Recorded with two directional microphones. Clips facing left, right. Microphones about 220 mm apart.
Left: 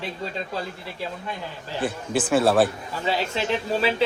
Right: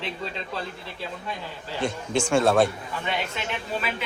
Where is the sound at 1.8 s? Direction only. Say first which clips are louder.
Even; 5° left (ahead or behind).